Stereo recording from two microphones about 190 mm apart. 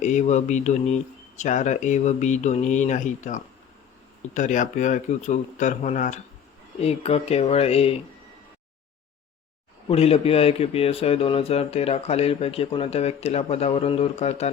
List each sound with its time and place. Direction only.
0.0 s speech: 40° left (ahead or behind)
9.9 s speech: 30° left (ahead or behind)